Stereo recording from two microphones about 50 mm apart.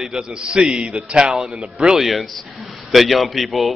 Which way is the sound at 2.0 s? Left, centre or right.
Centre.